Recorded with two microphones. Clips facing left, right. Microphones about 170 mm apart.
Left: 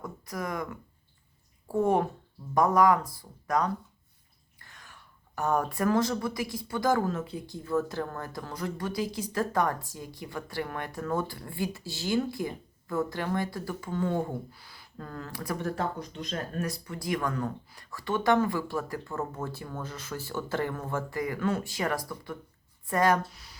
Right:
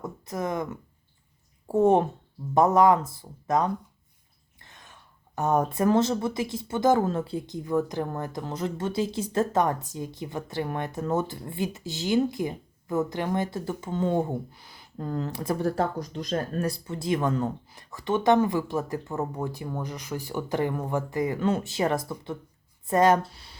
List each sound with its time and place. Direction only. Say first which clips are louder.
0.0 s speech: right 4 dB; 25° right (ahead or behind)